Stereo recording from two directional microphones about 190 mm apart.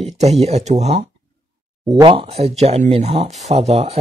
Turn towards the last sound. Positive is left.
turn(degrees=-35)  # may be behind; listen again after turning